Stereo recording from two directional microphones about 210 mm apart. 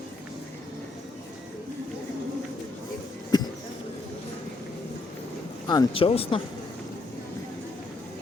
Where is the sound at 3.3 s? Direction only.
20° left (ahead or behind).